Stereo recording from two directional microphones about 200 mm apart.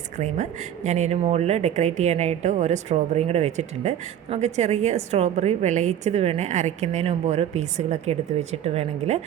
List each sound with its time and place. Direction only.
0.9 s speech: 35° right (ahead or behind)